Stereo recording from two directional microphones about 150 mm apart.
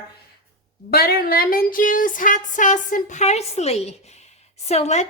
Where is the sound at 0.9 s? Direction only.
90° left.